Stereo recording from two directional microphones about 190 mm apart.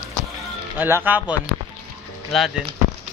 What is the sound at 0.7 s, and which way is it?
Speech, 10° right (ahead or behind).